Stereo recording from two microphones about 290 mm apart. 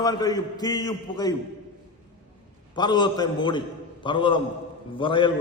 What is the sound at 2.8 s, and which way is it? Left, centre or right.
A man's voice, centre.